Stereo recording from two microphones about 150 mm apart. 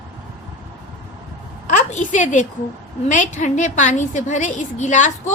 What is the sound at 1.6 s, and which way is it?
A woman's voice, 55° left (ahead or behind).